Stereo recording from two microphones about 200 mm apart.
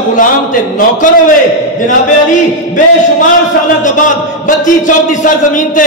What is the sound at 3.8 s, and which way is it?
A man's voice, 40° left (ahead or behind).